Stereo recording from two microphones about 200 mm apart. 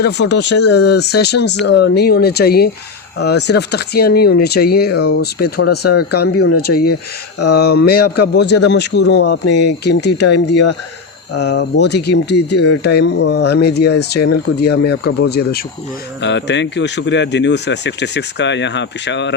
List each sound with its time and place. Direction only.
0.0 s speech: 60° left (ahead or behind)